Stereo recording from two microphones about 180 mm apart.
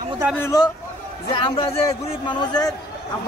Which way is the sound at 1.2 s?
30° left (ahead or behind).